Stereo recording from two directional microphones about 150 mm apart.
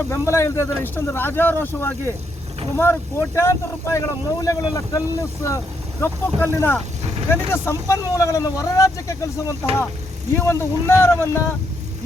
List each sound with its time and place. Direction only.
0.1 s speech: 20° left (ahead or behind)